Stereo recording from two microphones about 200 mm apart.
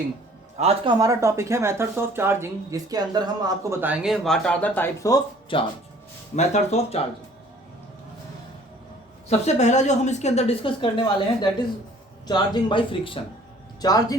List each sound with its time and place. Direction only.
0.6 s speech: 30° right (ahead or behind)
0.9 s speech: 15° right (ahead or behind); by 5.6 s 20° left (ahead or behind)
6.3 s a woman's voice: 35° left (ahead or behind)
9.4 s a woman's voice: 35° left (ahead or behind); by 14.2 s 20° left (ahead or behind)